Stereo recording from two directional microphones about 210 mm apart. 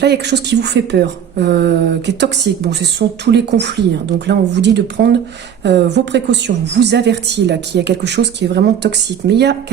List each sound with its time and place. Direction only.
0.0 s a woman's voice: 50° right (ahead or behind)